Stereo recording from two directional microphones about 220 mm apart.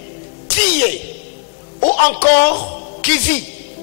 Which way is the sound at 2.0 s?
10° left (ahead or behind).